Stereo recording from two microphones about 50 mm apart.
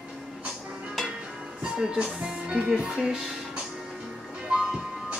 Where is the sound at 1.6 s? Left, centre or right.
Centre.